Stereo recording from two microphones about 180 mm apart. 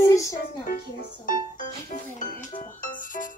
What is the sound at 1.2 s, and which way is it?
Music, 50° left (ahead or behind).